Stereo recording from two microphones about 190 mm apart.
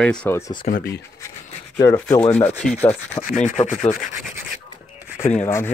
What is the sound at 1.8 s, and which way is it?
Rub, 20° left (ahead or behind).